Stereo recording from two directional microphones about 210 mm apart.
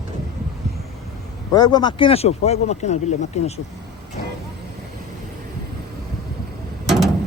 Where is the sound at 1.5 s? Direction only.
20° left (ahead or behind).